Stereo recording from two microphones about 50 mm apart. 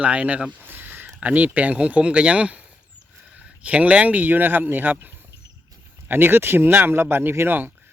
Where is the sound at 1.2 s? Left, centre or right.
Right.